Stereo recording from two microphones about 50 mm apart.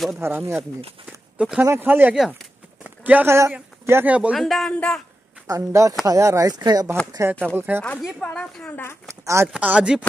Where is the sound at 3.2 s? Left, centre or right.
Right.